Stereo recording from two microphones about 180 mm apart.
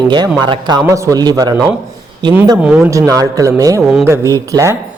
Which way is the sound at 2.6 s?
5° right (ahead or behind).